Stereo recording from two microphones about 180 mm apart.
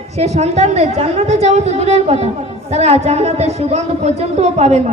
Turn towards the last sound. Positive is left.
turn(degrees=-40)  # may be behind; listen again after turning